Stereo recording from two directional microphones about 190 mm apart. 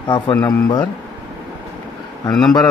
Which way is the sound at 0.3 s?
10° left (ahead or behind).